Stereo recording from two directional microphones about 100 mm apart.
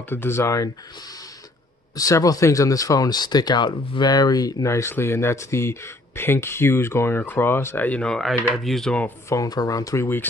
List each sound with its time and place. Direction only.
0.1 s speech: 25° left (ahead or behind)
2.0 s speech: 35° left (ahead or behind); by 8.9 s 5° left (ahead or behind)
9.3 s speech: 40° left (ahead or behind)